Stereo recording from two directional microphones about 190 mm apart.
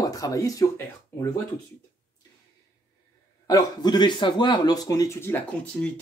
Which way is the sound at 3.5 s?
20° left (ahead or behind).